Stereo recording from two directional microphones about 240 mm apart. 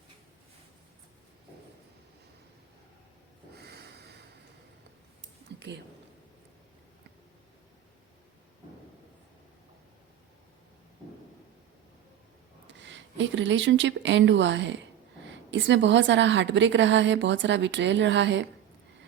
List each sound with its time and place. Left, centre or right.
3.5 s snort: right
5.5 s a sound: right
12.6 s a woman's voice: right